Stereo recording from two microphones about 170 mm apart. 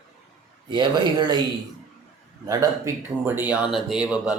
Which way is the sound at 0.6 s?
25° right (ahead or behind).